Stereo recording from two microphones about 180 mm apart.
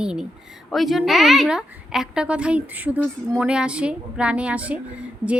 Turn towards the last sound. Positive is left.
turn(degrees=-5)  # may be behind; listen again after turning